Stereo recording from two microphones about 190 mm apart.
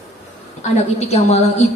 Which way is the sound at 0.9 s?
35° left (ahead or behind).